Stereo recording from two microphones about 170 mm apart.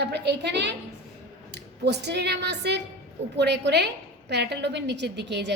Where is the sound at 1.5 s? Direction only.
80° right.